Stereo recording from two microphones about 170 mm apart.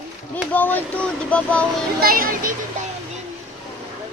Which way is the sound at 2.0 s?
60° right (ahead or behind).